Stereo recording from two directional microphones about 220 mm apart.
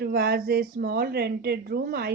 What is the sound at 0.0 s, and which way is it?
Speech, 45° right (ahead or behind).